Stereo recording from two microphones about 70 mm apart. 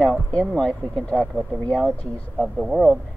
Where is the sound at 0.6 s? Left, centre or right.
Centre.